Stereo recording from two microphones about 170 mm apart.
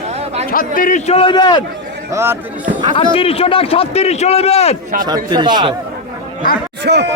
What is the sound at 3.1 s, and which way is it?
A man's voice, 35° left (ahead or behind).